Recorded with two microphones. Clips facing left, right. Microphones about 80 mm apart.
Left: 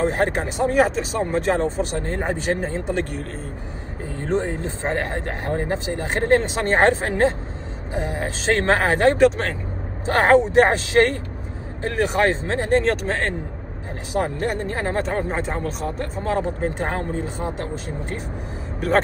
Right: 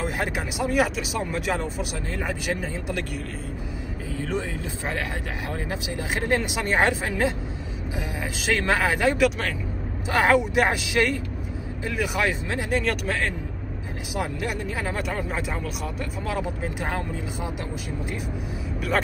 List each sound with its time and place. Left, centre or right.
0.0 s speech: left
4.2 s speech: left